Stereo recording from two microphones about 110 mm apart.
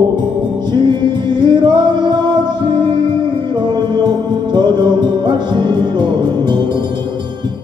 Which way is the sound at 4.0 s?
40° right (ahead or behind).